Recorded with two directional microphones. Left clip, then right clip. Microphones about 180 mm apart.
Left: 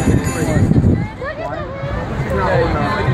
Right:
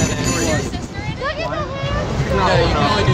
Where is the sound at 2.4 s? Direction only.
10° right (ahead or behind).